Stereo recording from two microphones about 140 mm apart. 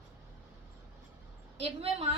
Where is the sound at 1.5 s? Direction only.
45° right (ahead or behind).